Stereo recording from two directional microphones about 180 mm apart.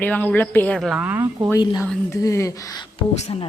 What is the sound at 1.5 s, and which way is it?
Speech, 20° left (ahead or behind).